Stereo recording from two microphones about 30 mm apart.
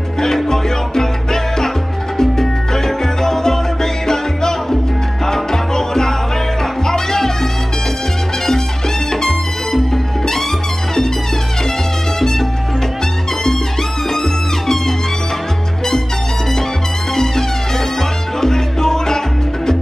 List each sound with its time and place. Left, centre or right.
0.5 s music: centre
2.1 s salsa music: centre
5.2 s music: centre
9.1 s music: centre
12.2 s salsa music: centre
14.1 s music: centre
17.1 s music: centre